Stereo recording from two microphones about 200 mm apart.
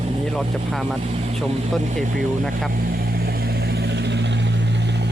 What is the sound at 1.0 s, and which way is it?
Speech, 30° right (ahead or behind).